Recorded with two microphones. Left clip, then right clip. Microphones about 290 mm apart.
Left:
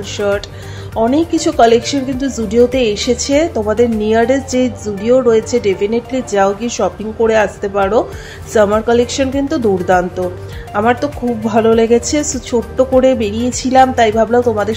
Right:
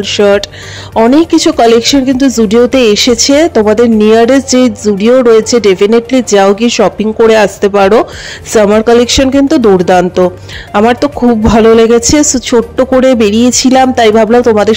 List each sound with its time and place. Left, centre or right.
0.0 s speech: right